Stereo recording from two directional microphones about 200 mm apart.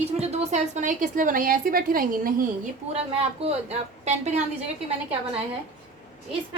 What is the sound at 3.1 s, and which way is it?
Speech, 30° right (ahead or behind).